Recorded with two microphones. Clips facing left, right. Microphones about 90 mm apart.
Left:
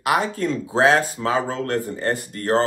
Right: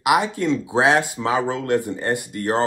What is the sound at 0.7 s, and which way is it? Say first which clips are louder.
Speech: left 2 dB; 15° right (ahead or behind).